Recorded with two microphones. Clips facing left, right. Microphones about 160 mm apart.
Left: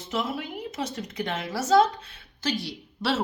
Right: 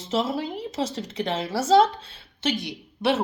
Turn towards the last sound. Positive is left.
turn(degrees=-20)  # may be behind; listen again after turning